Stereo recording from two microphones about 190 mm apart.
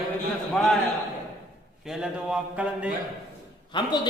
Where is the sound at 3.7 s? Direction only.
25° left (ahead or behind).